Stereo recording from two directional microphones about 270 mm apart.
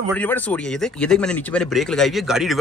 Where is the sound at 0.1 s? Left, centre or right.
Centre.